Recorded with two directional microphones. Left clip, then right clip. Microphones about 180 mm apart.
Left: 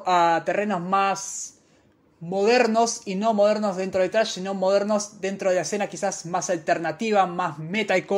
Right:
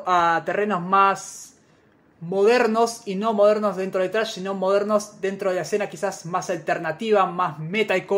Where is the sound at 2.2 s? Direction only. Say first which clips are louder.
Right 2 dB; 30° left (ahead or behind).